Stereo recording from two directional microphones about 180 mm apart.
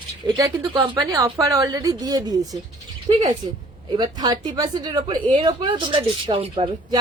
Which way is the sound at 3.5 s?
25° right (ahead or behind).